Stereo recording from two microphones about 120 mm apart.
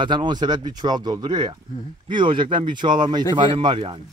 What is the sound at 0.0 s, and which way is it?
Speech, 40° right (ahead or behind).